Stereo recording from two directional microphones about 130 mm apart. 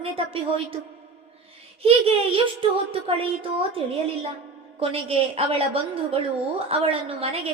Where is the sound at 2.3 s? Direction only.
45° right (ahead or behind).